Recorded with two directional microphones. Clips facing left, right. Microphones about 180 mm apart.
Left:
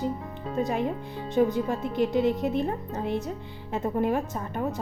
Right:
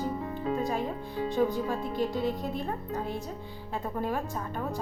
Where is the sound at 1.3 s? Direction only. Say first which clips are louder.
Left 5 dB; 20° left (ahead or behind).